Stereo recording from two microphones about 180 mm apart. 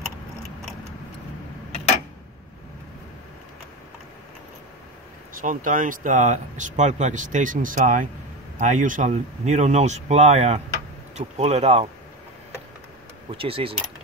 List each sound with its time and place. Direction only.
5.4 s speech: 45° right (ahead or behind)
13.3 s speech: 30° right (ahead or behind)